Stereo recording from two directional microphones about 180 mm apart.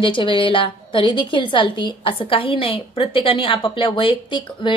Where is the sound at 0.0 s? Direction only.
30° left (ahead or behind).